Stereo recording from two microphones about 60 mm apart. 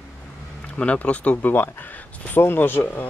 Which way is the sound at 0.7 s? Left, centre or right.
Left.